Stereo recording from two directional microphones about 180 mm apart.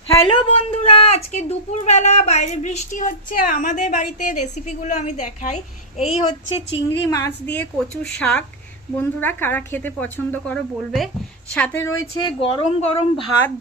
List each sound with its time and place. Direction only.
0.3 s speech: 35° left (ahead or behind)
7.1 s speech: 15° left (ahead or behind)
12.2 s speech: 30° left (ahead or behind)